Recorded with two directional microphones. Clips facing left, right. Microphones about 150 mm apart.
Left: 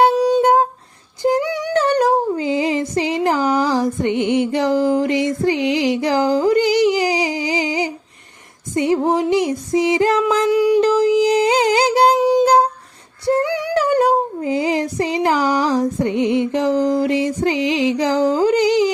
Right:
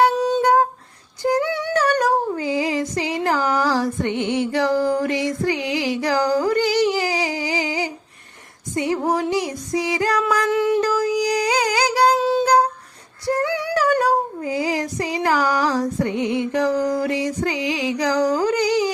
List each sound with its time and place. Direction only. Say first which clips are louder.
0.1 s music: left 4 dB; 10° left (ahead or behind)
1.2 s female singing: left 2 dB; 20° left (ahead or behind)
1.7 s a sound: left 4 dB; 25° left (ahead or behind)
10.5 s a sound: left 4 dB; 10° left (ahead or behind)
10.8 s music: left 6 dB; 20° left (ahead or behind)
13.4 s female singing: left 2 dB; 15° left (ahead or behind)